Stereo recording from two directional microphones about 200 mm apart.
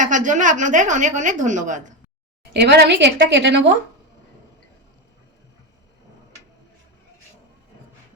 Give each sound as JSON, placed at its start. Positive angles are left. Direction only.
{"t": 0.0, "sound": "a woman's voice", "side_deg": -40}
{"t": 2.5, "sound": "a woman's voice", "side_deg": -55}